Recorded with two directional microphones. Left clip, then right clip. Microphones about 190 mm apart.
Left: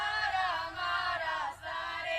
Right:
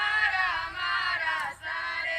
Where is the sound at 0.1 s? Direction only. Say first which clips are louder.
Right 6 dB; 65° left (ahead or behind).